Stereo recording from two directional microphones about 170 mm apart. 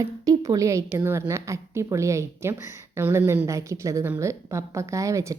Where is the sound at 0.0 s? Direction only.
20° right (ahead or behind).